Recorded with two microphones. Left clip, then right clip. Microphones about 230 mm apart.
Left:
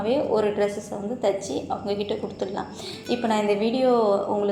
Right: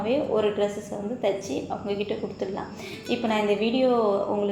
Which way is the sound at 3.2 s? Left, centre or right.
Left.